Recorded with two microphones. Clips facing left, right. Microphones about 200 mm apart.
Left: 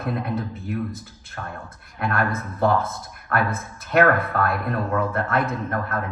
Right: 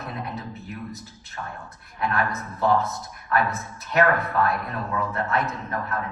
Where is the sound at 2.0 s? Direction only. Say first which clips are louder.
Left 2 dB; 55° left (ahead or behind).